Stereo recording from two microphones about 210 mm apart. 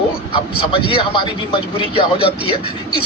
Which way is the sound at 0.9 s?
20° left (ahead or behind).